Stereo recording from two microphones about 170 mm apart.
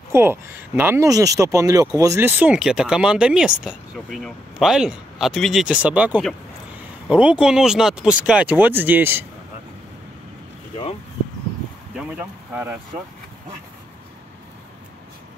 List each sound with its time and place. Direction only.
0.1 s speech: 15° right (ahead or behind)
12.1 s speech: 10° right (ahead or behind)